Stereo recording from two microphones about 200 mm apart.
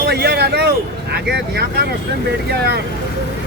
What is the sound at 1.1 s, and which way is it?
Speech, 55° right (ahead or behind).